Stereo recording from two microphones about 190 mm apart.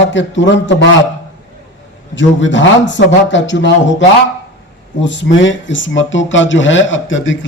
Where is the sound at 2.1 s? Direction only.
75° left (ahead or behind).